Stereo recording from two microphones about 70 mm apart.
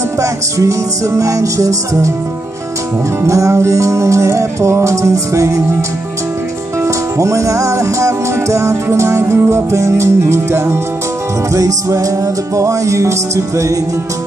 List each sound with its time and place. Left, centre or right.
0.2 s music: right
3.3 s music: right
6.8 s music: right
11.5 s music: right